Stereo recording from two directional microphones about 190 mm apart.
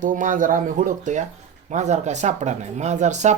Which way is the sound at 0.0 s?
45° right (ahead or behind).